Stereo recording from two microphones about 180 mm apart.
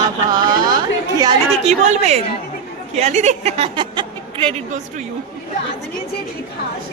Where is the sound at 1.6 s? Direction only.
40° right (ahead or behind).